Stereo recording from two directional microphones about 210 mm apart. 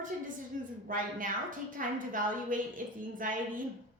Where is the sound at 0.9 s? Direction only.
40° right (ahead or behind).